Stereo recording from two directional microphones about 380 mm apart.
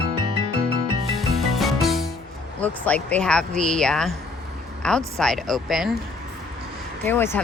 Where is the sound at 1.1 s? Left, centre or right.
Centre.